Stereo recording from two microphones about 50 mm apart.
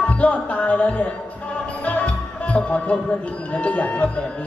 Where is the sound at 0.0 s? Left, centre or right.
Left.